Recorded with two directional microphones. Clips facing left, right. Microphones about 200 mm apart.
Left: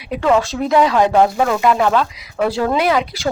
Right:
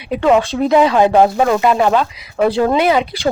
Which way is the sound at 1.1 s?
20° right (ahead or behind).